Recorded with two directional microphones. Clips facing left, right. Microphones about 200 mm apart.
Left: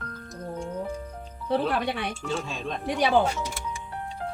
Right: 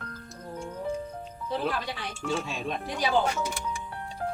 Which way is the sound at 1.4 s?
60° left (ahead or behind).